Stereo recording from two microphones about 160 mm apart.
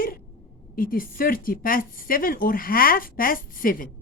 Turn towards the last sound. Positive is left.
turn(degrees=60)  # may be behind; listen again after turning